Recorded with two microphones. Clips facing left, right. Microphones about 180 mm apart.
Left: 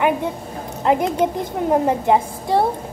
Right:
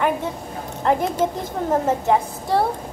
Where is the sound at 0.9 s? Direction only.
15° left (ahead or behind).